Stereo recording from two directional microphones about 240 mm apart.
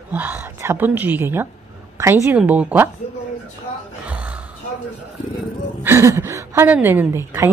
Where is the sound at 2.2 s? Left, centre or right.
Centre.